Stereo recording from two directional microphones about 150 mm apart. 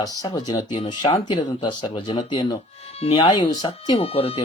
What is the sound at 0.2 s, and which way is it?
Speech, 25° left (ahead or behind).